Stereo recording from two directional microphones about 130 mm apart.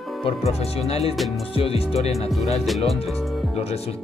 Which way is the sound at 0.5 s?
50° left (ahead or behind).